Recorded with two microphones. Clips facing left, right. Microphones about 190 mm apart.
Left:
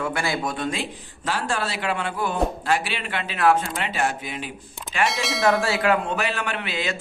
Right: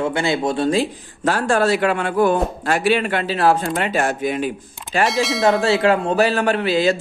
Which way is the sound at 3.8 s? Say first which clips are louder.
Right 6 dB; 45° right (ahead or behind).